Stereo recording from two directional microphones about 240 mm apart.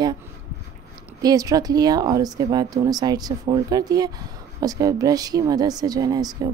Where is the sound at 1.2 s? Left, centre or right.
Centre.